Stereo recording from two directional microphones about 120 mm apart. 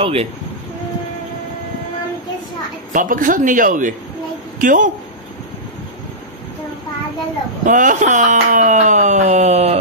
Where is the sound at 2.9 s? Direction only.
90° right.